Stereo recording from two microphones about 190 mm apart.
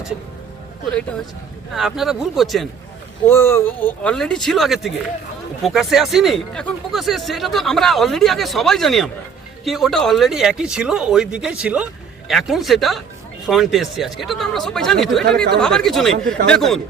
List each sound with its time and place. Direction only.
1.7 s speech: centre (ahead or behind)
3.2 s speech: 10° left (ahead or behind)